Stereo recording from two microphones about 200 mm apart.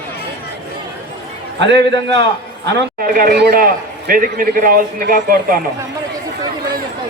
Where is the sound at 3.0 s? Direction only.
45° right (ahead or behind).